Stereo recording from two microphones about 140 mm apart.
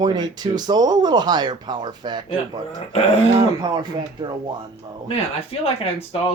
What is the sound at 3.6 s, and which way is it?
Speech, 35° right (ahead or behind).